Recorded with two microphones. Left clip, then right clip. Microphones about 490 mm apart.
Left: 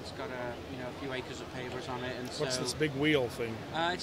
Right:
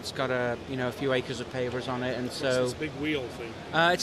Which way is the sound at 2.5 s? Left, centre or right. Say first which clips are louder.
Right 5 dB; left.